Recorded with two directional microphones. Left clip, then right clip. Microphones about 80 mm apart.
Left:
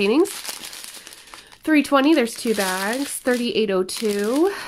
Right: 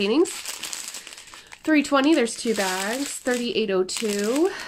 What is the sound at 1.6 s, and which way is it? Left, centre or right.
Speech, left.